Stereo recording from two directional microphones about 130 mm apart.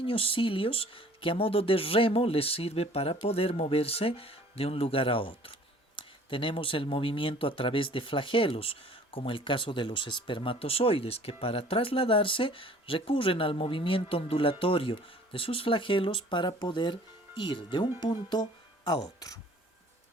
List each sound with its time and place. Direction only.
0.0 s speech: 45° left (ahead or behind); by 19.4 s 30° left (ahead or behind)